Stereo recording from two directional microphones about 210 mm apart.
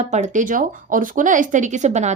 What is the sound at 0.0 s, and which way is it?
Speech, 35° right (ahead or behind).